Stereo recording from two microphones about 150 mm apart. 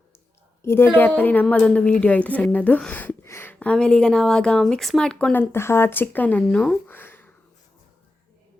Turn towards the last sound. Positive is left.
turn(degrees=15)  # may be behind; listen again after turning